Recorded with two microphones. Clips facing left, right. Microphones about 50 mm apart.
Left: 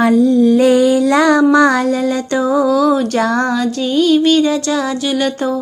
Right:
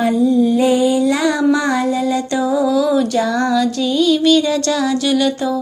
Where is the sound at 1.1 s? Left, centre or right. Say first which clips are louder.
Left 6 dB; left.